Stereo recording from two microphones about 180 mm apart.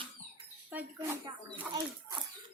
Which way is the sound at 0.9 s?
15° right (ahead or behind).